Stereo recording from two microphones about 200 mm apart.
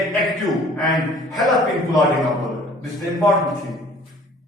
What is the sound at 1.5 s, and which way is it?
Speech, 20° left (ahead or behind).